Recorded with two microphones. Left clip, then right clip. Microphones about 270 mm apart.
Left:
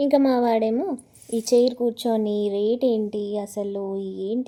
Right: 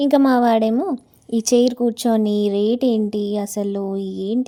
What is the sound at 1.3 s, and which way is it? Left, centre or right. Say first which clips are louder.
Speech: right 2 dB; right.